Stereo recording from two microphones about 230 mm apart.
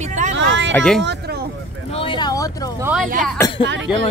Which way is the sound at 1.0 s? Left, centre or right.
Right.